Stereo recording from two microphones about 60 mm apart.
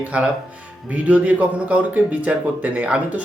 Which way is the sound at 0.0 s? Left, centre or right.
Centre.